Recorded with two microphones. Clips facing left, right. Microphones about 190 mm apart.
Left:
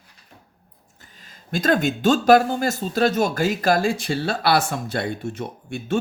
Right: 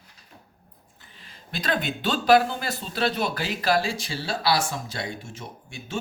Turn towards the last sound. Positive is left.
turn(degrees=60)  # may be behind; listen again after turning